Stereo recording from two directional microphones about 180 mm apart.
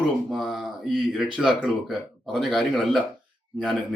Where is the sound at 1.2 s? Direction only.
Centre (ahead or behind).